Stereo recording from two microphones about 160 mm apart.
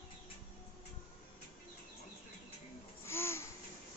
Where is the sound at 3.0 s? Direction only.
15° left (ahead or behind).